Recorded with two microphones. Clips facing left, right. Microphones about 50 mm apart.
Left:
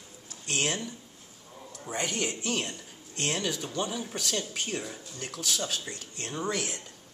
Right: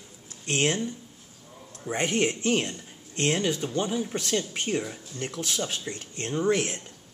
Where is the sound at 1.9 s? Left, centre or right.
Right.